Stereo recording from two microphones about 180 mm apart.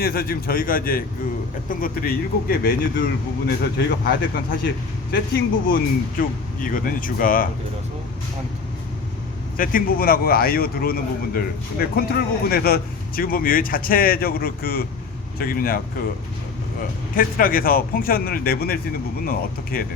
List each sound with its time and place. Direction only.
0.0 s speech: 55° left (ahead or behind)
3.4 s speech: 65° left (ahead or behind)
5.1 s speech: 60° left (ahead or behind)
9.6 s speech: 50° left (ahead or behind)
17.2 s speech: 50° left (ahead or behind)